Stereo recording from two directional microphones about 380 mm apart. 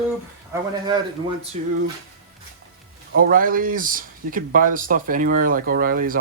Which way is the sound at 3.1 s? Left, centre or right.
Right.